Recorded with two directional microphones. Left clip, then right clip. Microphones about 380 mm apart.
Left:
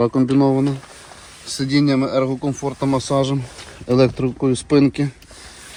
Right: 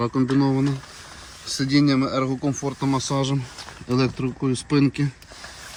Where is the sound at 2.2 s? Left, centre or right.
Left.